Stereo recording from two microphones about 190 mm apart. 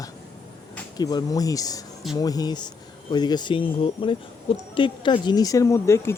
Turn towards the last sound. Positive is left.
turn(degrees=15)  # may be behind; listen again after turning